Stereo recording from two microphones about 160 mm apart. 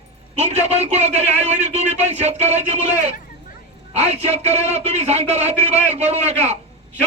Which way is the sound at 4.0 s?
45° right (ahead or behind).